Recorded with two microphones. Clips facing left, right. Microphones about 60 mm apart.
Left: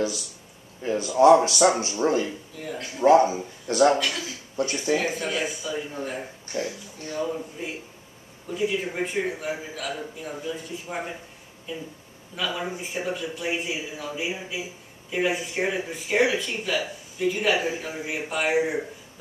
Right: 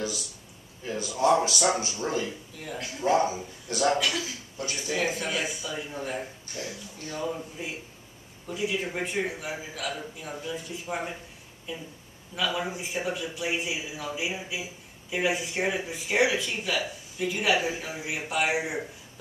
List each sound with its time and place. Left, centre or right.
0.8 s speech: left
2.5 s speech: centre
3.0 s a man's voice: left
4.9 s speech: centre
6.5 s speech: left
7.2 s speech: centre
12.4 s speech: centre